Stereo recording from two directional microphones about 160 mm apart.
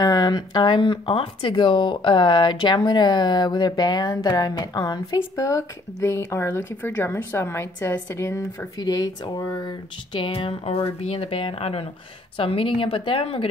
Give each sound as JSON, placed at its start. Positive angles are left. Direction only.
{"t": 0.0, "sound": "speech", "side_deg": 25}